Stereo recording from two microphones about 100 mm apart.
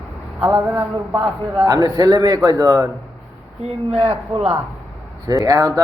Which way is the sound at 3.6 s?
90° right.